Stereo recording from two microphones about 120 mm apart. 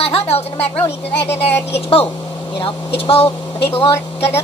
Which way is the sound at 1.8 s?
50° left (ahead or behind).